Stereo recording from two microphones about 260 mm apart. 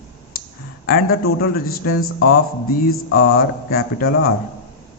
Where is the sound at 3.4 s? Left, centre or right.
Left.